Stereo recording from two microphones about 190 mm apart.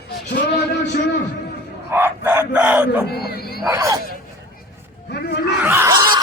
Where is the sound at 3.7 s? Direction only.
15° right (ahead or behind).